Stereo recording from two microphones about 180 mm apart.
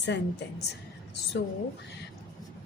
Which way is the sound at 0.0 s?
70° left (ahead or behind).